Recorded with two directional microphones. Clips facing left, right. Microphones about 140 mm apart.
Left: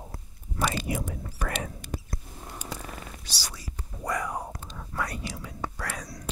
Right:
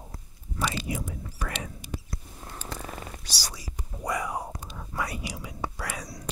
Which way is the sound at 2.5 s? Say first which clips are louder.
Even; 10° left (ahead or behind).